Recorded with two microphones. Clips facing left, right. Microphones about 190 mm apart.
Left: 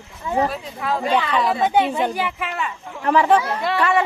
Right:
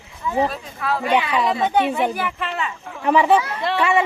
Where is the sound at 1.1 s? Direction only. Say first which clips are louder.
Right 1 dB; 10° right (ahead or behind).